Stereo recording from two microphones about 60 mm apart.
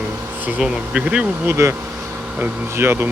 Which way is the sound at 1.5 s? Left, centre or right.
Right.